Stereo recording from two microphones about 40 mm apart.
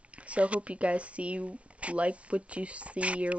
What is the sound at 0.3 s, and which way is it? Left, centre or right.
Speech, right.